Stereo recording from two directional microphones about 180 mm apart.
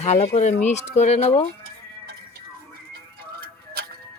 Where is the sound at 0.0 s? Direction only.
40° left (ahead or behind).